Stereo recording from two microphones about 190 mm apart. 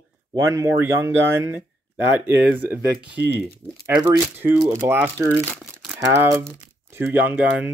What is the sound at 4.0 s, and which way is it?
Speech, 10° right (ahead or behind).